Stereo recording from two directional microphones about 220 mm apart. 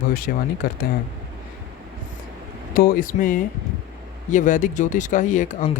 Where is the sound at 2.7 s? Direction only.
40° left (ahead or behind).